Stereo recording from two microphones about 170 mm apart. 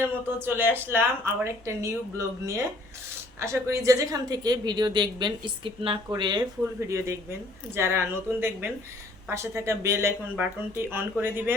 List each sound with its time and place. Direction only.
0.0 s a woman's voice: 15° right (ahead or behind)